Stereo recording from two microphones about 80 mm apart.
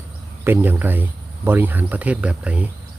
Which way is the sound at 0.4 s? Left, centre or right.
Right.